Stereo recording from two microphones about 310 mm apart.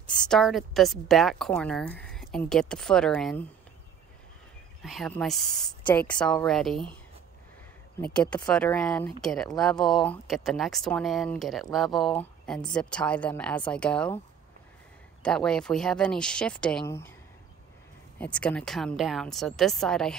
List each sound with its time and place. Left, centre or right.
0.0 s speech: centre
4.8 s speech: centre
8.0 s speech: centre
15.2 s speech: centre
18.2 s speech: centre